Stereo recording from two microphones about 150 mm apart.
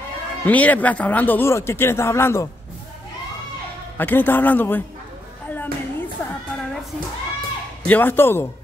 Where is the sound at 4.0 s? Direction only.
15° left (ahead or behind).